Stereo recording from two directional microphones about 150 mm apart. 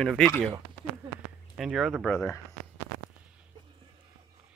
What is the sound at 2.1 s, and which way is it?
Speech, 15° left (ahead or behind).